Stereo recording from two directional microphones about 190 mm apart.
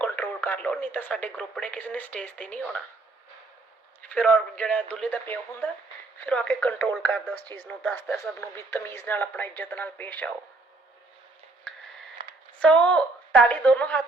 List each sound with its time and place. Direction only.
0.0 s speech: 10° left (ahead or behind)
4.0 s speech: 5° left (ahead or behind)
11.7 s a sound: 5° left (ahead or behind)
12.5 s a woman's voice: 5° left (ahead or behind)